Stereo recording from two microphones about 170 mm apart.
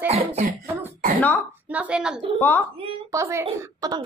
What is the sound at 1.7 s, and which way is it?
Speech, 5° right (ahead or behind).